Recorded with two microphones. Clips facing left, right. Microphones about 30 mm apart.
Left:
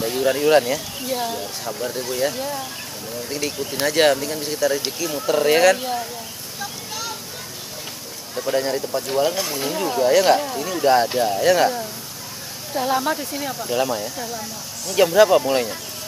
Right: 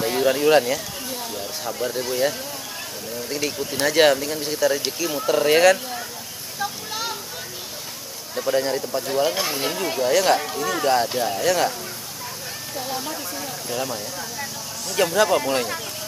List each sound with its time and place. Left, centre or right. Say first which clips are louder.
0.0 s speech: even; centre
6.6 s a sound: right 3 dB; centre
8.4 s speech: even; centre
9.3 s speech: even; centre
9.9 s speech: left 3 dB; centre
12.7 s speech: left 9 dB; left
13.7 s speech: left 6 dB; centre
14.9 s speech: left 5 dB; centre